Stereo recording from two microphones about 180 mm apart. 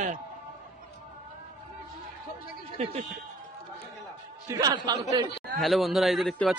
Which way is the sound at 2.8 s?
35° right (ahead or behind).